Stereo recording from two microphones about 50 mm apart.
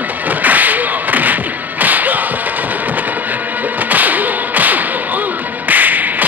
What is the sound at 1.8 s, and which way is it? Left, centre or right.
Whip, right.